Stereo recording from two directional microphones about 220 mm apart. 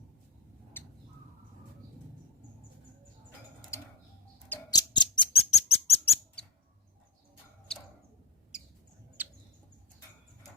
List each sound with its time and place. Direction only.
0.8 s bird: 10° left (ahead or behind)
4.4 s a sound: 15° left (ahead or behind)
9.2 s bird: 10° right (ahead or behind)